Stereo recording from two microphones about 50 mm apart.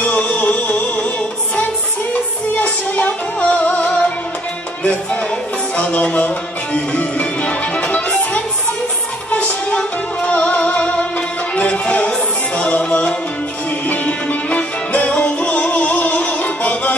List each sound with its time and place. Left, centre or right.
0.0 s music: left
2.5 s music: left
5.8 s music: left